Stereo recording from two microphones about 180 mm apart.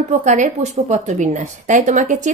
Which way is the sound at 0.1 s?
45° right (ahead or behind).